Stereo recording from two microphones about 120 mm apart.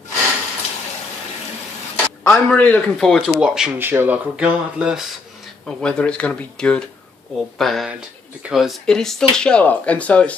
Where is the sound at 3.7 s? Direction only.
15° right (ahead or behind).